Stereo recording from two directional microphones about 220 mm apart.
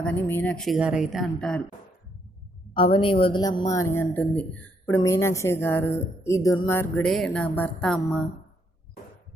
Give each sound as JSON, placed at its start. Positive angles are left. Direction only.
{"t": 0.0, "sound": "speech", "side_deg": 10}
{"t": 2.7, "sound": "a woman's voice", "side_deg": 25}